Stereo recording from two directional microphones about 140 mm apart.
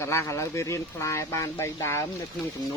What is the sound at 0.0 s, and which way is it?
Speech, 20° left (ahead or behind).